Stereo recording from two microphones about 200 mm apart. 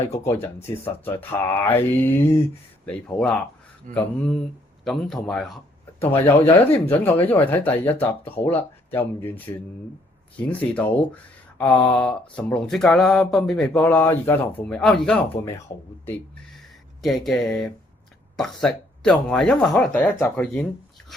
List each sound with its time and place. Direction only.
0.3 s speech: 10° left (ahead or behind)
3.9 s speech: 40° right (ahead or behind)
4.9 s speech: centre (ahead or behind)
10.5 s speech: 5° left (ahead or behind)
17.0 s speech: centre (ahead or behind)